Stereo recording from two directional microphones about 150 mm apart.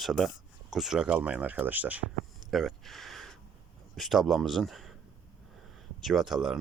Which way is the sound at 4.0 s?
Centre (ahead or behind).